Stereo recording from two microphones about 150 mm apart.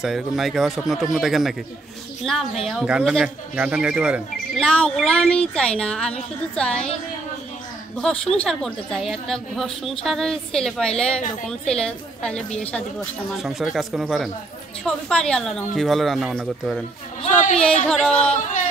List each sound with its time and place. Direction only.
0.0 s a woman's voice: centre (ahead or behind)
4.6 s a woman's voice: 5° left (ahead or behind)
8.0 s a woman's voice: 5° left (ahead or behind)
17.3 s a sound: 55° left (ahead or behind)
17.8 s a woman's voice: 5° left (ahead or behind)